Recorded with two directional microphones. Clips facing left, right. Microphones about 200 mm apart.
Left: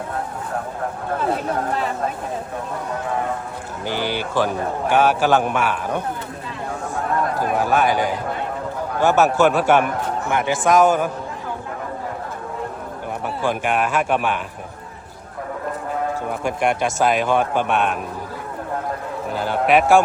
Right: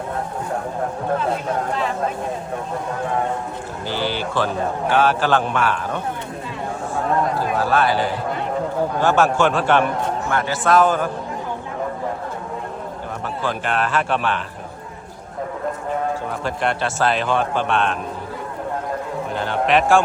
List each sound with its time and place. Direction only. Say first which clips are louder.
3.8 s a man's voice: even; 15° left (ahead or behind)
7.3 s speech: even; 15° left (ahead or behind)
9.0 s a man's voice: left 2 dB; 10° left (ahead or behind)
13.4 s a man's voice: left 2 dB; 10° left (ahead or behind)
16.4 s a man's voice: left 4 dB; 15° left (ahead or behind)
19.3 s a man's voice: left 2 dB; 5° left (ahead or behind)